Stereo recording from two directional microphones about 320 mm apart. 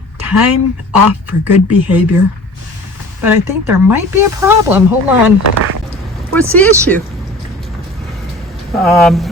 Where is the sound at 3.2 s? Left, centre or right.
Centre.